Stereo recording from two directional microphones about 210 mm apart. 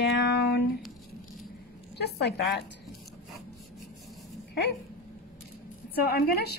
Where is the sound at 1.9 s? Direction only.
50° left (ahead or behind).